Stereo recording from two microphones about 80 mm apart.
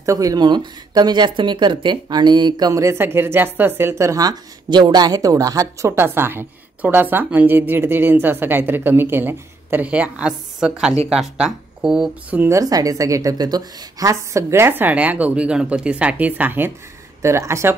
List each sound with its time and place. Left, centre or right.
0.0 s speech: right
2.8 s a woman's voice: right
4.1 s a woman's voice: right
5.9 s a woman's voice: right; by 12.4 s centre
12.4 s a woman's voice: right
17.2 s speech: right